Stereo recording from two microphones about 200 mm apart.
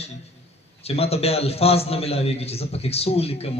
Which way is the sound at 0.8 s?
30° left (ahead or behind).